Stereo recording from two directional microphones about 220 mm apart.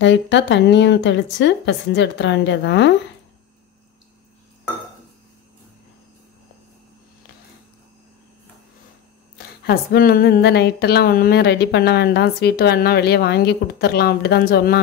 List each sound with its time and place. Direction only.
0.0 s a woman's voice: 55° left (ahead or behind)
9.7 s a woman's voice: 40° left (ahead or behind)